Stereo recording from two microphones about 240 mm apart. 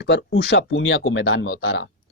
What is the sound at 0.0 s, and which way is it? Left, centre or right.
Speech, left.